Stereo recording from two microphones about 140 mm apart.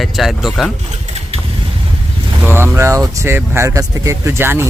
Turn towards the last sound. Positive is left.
turn(degrees=-15)  # may be behind; listen again after turning